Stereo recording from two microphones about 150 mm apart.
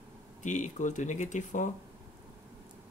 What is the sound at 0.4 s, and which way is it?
Speech, 55° left (ahead or behind).